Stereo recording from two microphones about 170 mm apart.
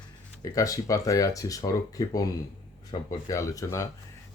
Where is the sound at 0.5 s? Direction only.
20° left (ahead or behind).